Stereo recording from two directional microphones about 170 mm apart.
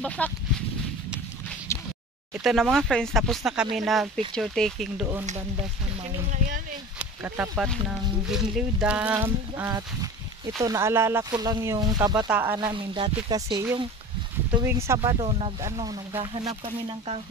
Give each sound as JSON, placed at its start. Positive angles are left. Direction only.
{"t": 0.2, "sound": "speech", "side_deg": 5}
{"t": 1.7, "sound": "a sound", "side_deg": 15}
{"t": 2.3, "sound": "speech", "side_deg": 0}
{"t": 5.2, "sound": "speech", "side_deg": -45}
{"t": 7.0, "sound": "a sound", "side_deg": -10}
{"t": 8.3, "sound": "speech", "side_deg": -5}
{"t": 12.3, "sound": "speech", "side_deg": -10}
{"t": 12.5, "sound": "speech", "side_deg": -25}
{"t": 15.1, "sound": "speech", "side_deg": -35}